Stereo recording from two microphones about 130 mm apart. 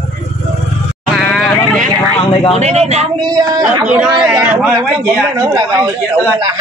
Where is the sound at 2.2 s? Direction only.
45° left (ahead or behind).